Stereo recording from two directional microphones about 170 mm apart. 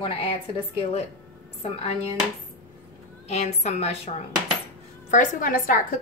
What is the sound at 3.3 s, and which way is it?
Speech, 40° left (ahead or behind).